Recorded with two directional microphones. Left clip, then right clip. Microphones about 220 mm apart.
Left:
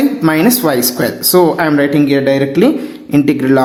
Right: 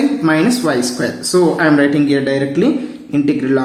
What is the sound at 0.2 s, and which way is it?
Speech, 40° left (ahead or behind).